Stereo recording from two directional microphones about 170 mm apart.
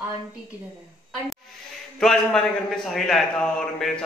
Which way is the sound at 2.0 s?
5° left (ahead or behind).